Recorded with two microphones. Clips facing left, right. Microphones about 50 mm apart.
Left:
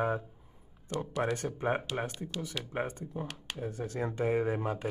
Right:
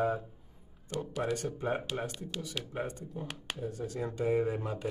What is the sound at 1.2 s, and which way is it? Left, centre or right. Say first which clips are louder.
Speech: left 2 dB; left.